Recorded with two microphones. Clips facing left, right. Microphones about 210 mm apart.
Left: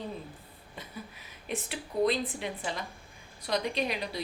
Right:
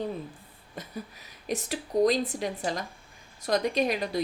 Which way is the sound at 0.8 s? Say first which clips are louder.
Right 5 dB; 45° right (ahead or behind).